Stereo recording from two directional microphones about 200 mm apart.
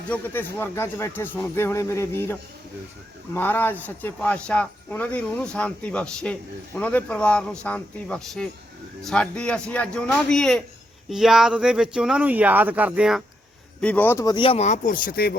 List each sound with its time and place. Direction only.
0.1 s speech: 10° left (ahead or behind)
13.8 s speech: 10° left (ahead or behind); by 15.4 s 50° left (ahead or behind)